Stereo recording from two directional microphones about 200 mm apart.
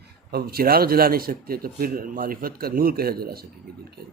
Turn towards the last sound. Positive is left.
turn(degrees=-50)  # may be behind; listen again after turning